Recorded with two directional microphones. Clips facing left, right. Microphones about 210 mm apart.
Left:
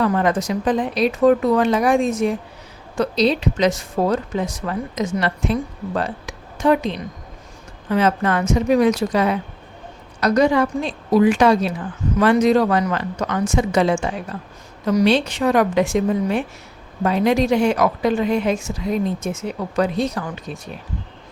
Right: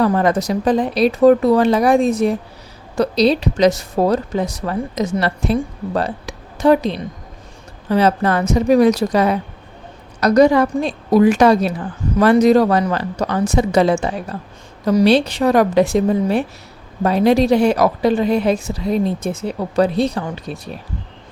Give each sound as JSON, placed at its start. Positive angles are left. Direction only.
{"t": 0.0, "sound": "a woman's voice", "side_deg": -35}